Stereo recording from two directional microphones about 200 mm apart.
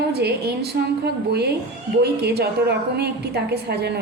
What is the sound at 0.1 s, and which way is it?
A woman's voice, 55° right (ahead or behind).